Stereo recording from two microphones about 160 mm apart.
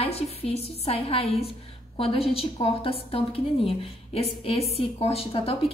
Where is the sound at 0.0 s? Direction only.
40° left (ahead or behind).